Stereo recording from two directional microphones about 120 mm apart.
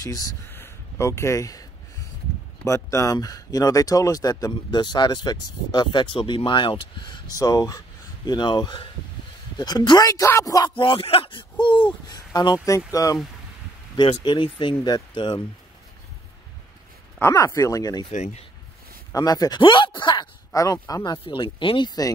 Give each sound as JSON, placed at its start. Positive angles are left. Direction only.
{"t": 0.0, "sound": "speech", "side_deg": 30}
{"t": 0.5, "sound": "a sound", "side_deg": 20}
{"t": 2.6, "sound": "speech", "side_deg": 25}
{"t": 10.7, "sound": "speech", "side_deg": 50}
{"t": 12.1, "sound": "speech", "side_deg": 35}
{"t": 14.2, "sound": "speech", "side_deg": 45}
{"t": 17.2, "sound": "speech", "side_deg": 25}
{"t": 18.1, "sound": "speech", "side_deg": 70}
{"t": 19.1, "sound": "speech", "side_deg": 30}
{"t": 20.5, "sound": "speech", "side_deg": 30}